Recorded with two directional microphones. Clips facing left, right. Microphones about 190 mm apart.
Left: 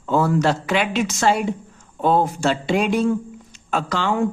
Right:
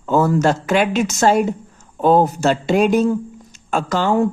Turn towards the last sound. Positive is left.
turn(degrees=-40)  # may be behind; listen again after turning